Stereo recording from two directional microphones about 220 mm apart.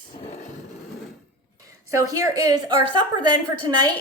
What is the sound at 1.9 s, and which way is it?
Speech, 15° right (ahead or behind).